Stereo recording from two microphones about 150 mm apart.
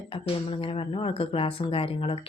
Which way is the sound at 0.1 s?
40° left (ahead or behind).